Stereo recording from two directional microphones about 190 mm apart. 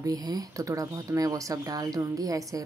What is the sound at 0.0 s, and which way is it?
Speech, 20° right (ahead or behind).